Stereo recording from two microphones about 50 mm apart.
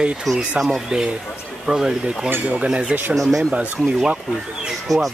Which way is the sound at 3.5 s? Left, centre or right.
Right.